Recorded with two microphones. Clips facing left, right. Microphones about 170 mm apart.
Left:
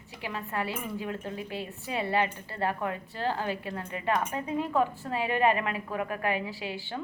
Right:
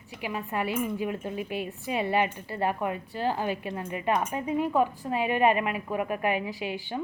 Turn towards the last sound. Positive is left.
turn(degrees=-15)  # may be behind; listen again after turning